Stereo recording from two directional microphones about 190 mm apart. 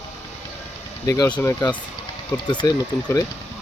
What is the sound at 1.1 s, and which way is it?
Speech, 10° left (ahead or behind).